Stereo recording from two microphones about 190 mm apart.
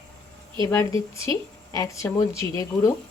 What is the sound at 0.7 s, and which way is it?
A woman's voice, 15° left (ahead or behind).